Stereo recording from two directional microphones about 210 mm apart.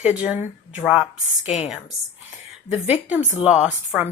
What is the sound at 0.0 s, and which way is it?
A woman's voice, 5° right (ahead or behind).